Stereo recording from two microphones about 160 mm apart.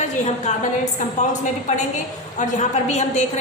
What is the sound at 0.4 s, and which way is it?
A woman's voice, 50° left (ahead or behind).